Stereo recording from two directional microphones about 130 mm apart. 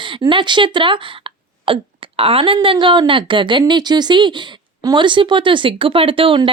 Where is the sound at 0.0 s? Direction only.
40° right (ahead or behind).